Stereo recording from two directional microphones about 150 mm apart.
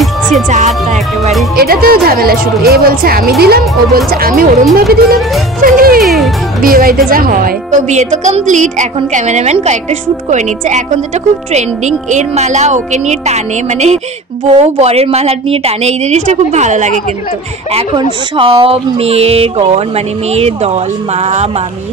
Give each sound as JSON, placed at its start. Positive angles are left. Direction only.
{"t": 0.5, "sound": "a woman's voice", "side_deg": -50}
{"t": 1.6, "sound": "a woman's voice", "side_deg": -90}
{"t": 4.7, "sound": "music", "side_deg": -90}
{"t": 5.6, "sound": "speech", "side_deg": -70}
{"t": 6.0, "sound": "speech", "side_deg": 0}
{"t": 6.6, "sound": "a woman's voice", "side_deg": -75}
{"t": 18.3, "sound": "a woman's voice", "side_deg": -35}